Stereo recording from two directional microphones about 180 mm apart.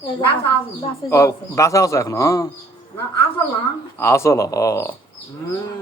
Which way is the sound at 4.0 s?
15° left (ahead or behind).